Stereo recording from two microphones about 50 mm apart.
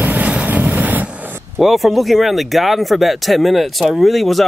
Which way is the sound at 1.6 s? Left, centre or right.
Centre.